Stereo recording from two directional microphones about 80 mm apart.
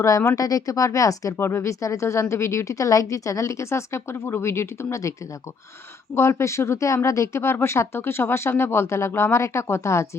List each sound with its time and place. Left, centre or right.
0.3 s speech: left
1.4 s speech: left
6.1 s speech: left